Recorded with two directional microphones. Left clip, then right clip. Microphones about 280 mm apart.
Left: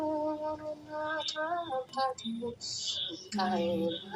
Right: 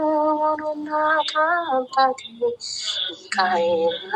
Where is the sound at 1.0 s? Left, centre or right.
Right.